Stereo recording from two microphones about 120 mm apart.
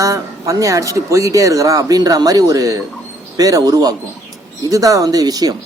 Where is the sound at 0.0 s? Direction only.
30° right (ahead or behind).